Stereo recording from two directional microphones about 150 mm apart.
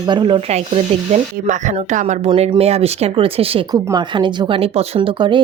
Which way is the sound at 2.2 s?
35° right (ahead or behind).